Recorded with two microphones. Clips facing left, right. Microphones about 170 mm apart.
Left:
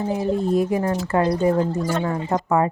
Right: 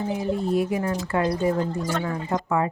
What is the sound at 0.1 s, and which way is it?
Speech, 40° left (ahead or behind).